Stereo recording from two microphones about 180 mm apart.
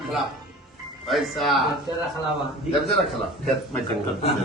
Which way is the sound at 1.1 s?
Centre (ahead or behind).